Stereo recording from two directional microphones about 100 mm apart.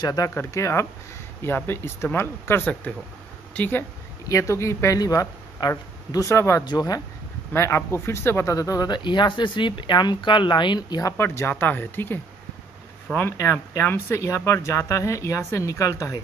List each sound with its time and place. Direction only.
0.0 s speech: 40° left (ahead or behind)
0.3 s speech: 25° left (ahead or behind)
4.3 s speech: 30° left (ahead or behind)
6.6 s speech: 45° left (ahead or behind)
7.5 s speech: 25° left (ahead or behind); by 11.0 s 50° left (ahead or behind)
11.0 s speech: 35° left (ahead or behind)
11.2 s speech: 20° left (ahead or behind)
13.4 s speech: 25° left (ahead or behind)